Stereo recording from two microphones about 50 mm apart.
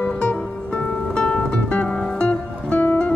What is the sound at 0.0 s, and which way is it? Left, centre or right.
Music, left.